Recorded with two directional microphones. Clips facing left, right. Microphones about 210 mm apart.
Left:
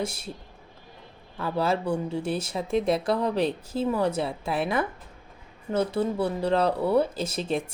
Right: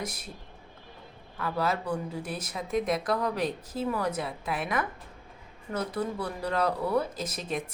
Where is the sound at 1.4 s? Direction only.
30° left (ahead or behind).